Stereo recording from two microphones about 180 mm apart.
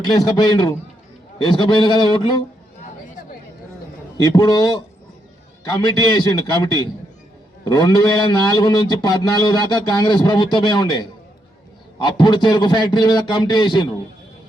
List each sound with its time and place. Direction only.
0.2 s a man's voice: 20° left (ahead or behind)
4.2 s a man's voice: 20° left (ahead or behind)
5.8 s a man's voice: 25° left (ahead or behind)
12.0 s a man's voice: 25° left (ahead or behind)